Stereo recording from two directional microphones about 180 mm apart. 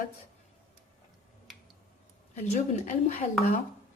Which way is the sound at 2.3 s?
40° left (ahead or behind).